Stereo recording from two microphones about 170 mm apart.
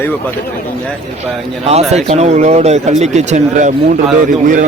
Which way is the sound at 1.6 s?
40° right (ahead or behind).